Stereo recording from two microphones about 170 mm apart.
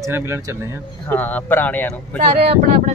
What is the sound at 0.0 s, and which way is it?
Speech, 15° right (ahead or behind).